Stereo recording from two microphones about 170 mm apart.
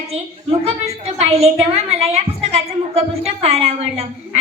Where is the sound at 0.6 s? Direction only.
35° right (ahead or behind).